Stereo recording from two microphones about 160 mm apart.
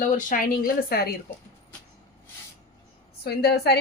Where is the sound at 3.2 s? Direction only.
85° left.